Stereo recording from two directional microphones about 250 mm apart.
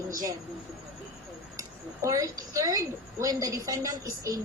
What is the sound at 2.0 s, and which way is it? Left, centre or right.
A woman's voice, centre.